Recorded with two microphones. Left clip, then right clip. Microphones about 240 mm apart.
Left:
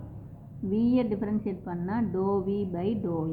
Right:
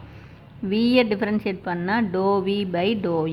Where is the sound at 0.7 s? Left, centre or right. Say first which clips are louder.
Right 8 dB; right.